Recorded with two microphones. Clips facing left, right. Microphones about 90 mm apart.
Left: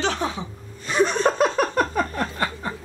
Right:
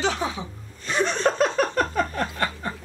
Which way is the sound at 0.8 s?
10° left (ahead or behind).